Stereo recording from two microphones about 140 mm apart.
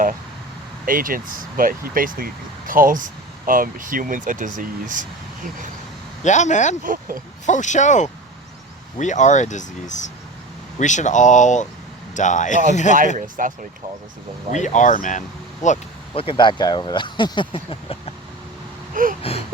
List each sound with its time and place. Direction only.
0.9 s speech: 80° right
6.2 s speech: 60° left (ahead or behind)
6.8 s speech: 75° right (ahead or behind)
7.4 s speech: 60° left (ahead or behind)
13.1 s speech: 70° right (ahead or behind)
14.5 s speech: 60° left (ahead or behind)
16.1 s speech: 40° left (ahead or behind)
19.0 s speech: 75° right (ahead or behind)